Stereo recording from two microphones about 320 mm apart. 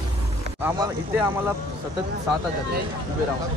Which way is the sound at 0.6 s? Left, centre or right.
Centre.